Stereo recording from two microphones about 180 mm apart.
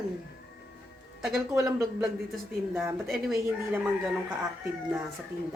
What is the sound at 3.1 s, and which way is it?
Speech, centre (ahead or behind).